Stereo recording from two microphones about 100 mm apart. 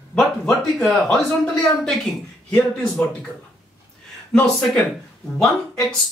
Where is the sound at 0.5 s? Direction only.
Centre (ahead or behind).